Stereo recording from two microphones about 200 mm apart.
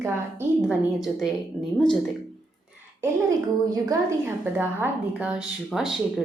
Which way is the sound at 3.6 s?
15° right (ahead or behind).